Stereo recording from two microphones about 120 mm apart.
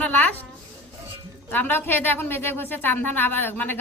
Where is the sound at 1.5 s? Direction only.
15° left (ahead or behind).